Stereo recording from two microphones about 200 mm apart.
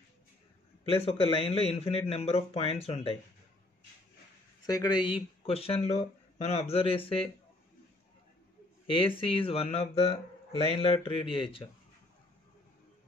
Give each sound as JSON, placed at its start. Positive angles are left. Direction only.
{"t": 0.8, "sound": "speech", "side_deg": 30}
{"t": 4.6, "sound": "speech", "side_deg": 20}
{"t": 8.8, "sound": "speech", "side_deg": 25}